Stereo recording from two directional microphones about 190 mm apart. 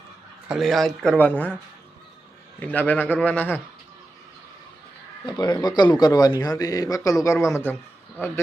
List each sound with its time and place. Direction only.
0.4 s speech: centre (ahead or behind)
2.6 s speech: 10° left (ahead or behind)
5.2 s speech: 20° left (ahead or behind)